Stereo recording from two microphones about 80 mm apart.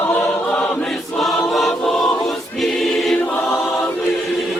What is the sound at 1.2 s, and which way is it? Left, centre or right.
Choir, centre.